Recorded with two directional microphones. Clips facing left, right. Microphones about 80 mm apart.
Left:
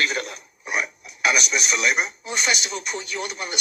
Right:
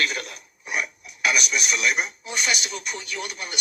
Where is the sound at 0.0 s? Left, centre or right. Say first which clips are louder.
Left 2 dB; left.